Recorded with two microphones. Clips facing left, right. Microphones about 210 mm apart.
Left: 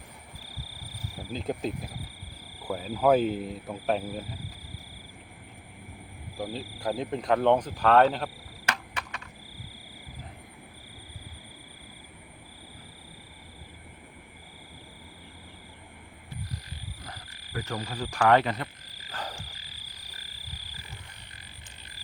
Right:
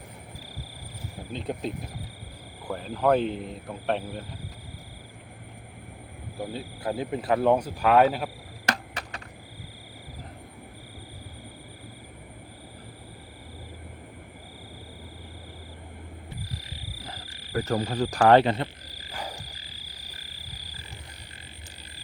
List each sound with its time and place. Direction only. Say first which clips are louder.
1.3 s speech: even; centre (ahead or behind)
6.4 s speech: even; centre (ahead or behind)
8.6 s a sound: right 4 dB; 35° right (ahead or behind)
17.1 s frog: right 10 dB; 30° right (ahead or behind)
19.1 s frog: right 1 dB; 10° right (ahead or behind)